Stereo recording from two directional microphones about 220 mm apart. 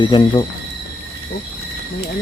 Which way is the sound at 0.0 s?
20° left (ahead or behind).